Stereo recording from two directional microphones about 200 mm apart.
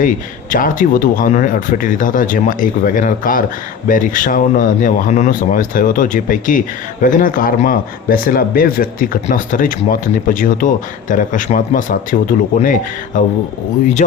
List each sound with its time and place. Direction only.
0.5 s speech: 40° left (ahead or behind)